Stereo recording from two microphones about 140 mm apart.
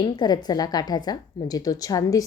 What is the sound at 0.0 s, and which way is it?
A woman's voice, 30° left (ahead or behind).